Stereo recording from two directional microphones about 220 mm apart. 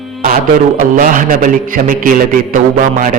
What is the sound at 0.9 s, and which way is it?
A man's voice, 40° right (ahead or behind).